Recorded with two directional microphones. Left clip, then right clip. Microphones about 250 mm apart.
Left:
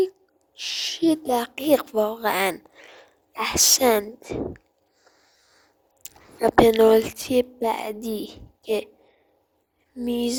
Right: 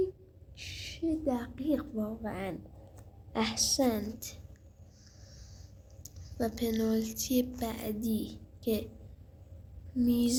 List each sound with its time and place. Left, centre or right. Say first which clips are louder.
0.5 s a woman's voice: left 15 dB; left
6.4 s a woman's voice: left 18 dB; left
9.9 s a woman's voice: left 4 dB; left